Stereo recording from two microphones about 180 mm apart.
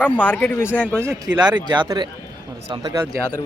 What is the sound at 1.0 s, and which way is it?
Speech, 10° right (ahead or behind).